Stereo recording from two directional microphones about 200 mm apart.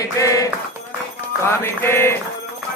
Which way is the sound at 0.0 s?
15° left (ahead or behind).